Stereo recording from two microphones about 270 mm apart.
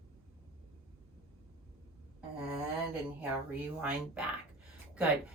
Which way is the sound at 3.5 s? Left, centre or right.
Centre.